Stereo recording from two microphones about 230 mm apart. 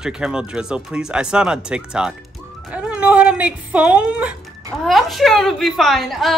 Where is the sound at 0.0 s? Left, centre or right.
Centre.